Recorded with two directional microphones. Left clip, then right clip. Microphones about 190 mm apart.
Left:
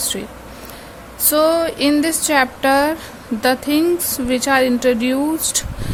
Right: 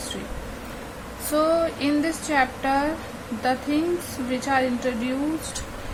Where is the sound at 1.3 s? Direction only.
65° left (ahead or behind).